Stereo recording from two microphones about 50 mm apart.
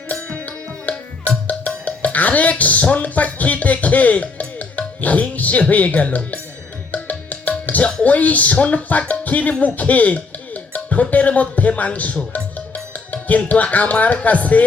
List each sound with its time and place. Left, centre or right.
0.3 s music: left
5.3 s speech: left
6.9 s music: left
8.0 s speech: left
13.1 s tabla: left
13.4 s speech: left